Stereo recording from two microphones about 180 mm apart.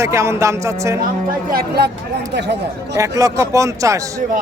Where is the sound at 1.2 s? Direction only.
55° right (ahead or behind).